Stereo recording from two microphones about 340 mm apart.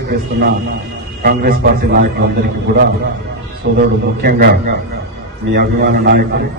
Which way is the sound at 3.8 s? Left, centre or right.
Right.